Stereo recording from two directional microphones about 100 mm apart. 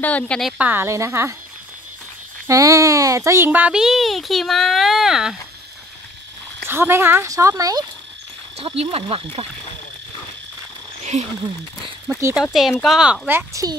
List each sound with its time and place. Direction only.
0.0 s speech: 15° left (ahead or behind)
0.6 s a woman's voice: 20° right (ahead or behind)
2.4 s speech: 35° right (ahead or behind); by 5.4 s 5° right (ahead or behind)
6.7 s a woman's voice: 25° right (ahead or behind)
8.5 s speech: 85° right
12.4 s speech: centre (ahead or behind)
13.5 s speech: 35° right (ahead or behind)